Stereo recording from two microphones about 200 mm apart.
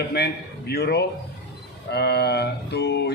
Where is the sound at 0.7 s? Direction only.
55° left (ahead or behind).